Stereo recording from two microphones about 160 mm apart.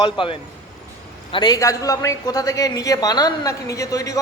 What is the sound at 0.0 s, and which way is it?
A man's voice, 30° left (ahead or behind).